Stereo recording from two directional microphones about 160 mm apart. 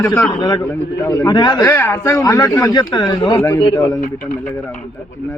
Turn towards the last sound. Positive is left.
turn(degrees=15)  # may be behind; listen again after turning